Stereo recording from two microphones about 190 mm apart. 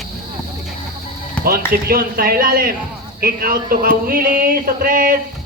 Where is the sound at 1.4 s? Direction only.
50° right (ahead or behind).